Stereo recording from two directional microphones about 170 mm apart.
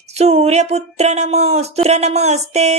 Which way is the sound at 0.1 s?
40° right (ahead or behind).